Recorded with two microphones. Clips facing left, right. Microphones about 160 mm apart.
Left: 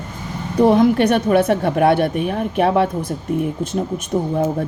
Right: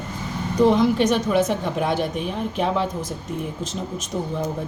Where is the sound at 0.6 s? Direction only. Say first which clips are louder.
Left 4 dB; 60° left (ahead or behind).